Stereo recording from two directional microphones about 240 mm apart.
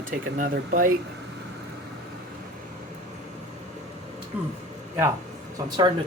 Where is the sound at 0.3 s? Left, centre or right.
Right.